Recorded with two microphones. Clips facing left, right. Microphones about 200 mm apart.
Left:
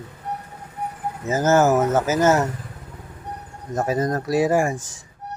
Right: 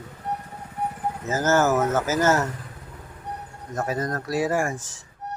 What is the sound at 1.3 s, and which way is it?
Speech, 15° left (ahead or behind).